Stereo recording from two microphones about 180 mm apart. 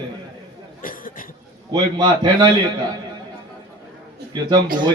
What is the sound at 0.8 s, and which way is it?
Cough, 50° left (ahead or behind).